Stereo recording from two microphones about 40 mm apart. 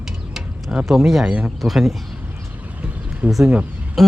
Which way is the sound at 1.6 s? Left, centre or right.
Centre.